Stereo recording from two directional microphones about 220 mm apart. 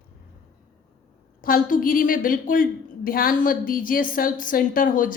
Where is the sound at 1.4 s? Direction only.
40° left (ahead or behind).